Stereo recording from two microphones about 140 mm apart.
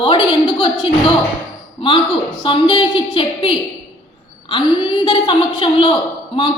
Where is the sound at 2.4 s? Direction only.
35° left (ahead or behind).